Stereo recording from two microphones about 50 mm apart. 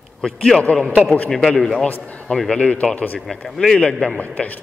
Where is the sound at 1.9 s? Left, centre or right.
Left.